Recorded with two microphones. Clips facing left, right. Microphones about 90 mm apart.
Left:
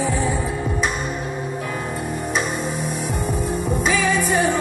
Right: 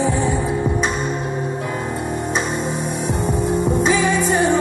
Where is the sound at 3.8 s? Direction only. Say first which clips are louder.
Even; 25° right (ahead or behind).